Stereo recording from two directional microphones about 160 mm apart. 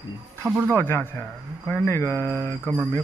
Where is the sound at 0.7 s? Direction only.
15° left (ahead or behind).